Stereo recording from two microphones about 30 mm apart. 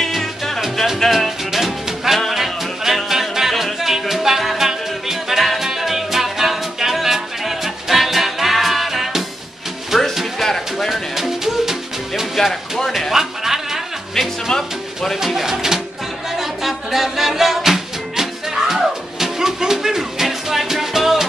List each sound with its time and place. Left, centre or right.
1.0 s music: centre
1.5 s music: centre
10.4 s music: centre
10.9 s music: centre
12.4 s a sound: centre
13.1 s a sound: centre
14.5 s music: centre
15.2 s pigeon: centre
16.3 s music: centre